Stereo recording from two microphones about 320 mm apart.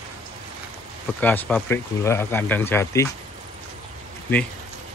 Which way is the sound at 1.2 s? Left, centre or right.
Centre.